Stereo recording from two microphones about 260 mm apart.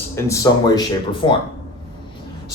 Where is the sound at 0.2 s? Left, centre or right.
Centre.